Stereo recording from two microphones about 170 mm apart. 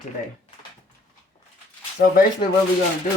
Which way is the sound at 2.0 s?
55° left (ahead or behind).